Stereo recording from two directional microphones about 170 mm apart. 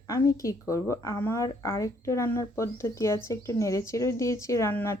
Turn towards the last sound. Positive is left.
turn(degrees=15)  # may be behind; listen again after turning